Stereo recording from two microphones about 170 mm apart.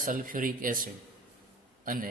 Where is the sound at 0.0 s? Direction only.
55° right (ahead or behind).